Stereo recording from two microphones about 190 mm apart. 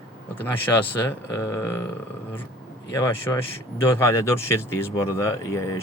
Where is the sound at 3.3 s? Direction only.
15° left (ahead or behind).